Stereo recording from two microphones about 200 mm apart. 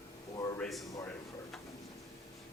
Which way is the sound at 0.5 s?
5° left (ahead or behind).